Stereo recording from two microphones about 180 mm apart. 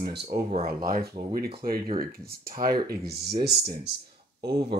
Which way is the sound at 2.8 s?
65° right (ahead or behind).